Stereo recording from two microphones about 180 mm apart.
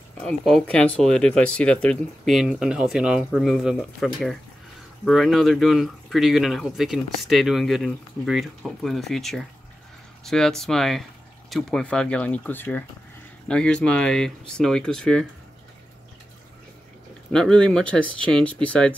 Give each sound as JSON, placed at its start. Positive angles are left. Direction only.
{"t": 0.2, "sound": "speech", "side_deg": 5}
{"t": 17.3, "sound": "speech", "side_deg": 5}